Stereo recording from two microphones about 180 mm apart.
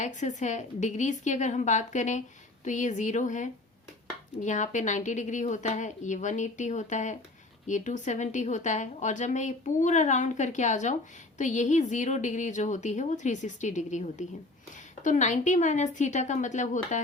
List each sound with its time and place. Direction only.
0.0 s a woman's voice: 45° left (ahead or behind)